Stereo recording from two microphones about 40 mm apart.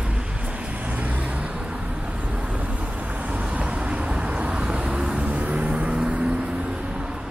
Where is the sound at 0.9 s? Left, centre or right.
Right.